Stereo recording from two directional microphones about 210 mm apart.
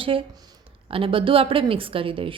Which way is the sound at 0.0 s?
25° right (ahead or behind).